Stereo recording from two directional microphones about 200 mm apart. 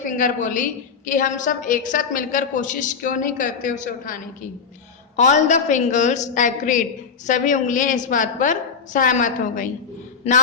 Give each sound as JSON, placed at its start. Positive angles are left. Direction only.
{"t": 0.2, "sound": "a woman's voice", "side_deg": 40}